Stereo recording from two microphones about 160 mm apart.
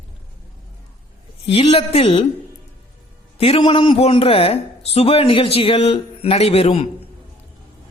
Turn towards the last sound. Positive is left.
turn(degrees=40)  # may be behind; listen again after turning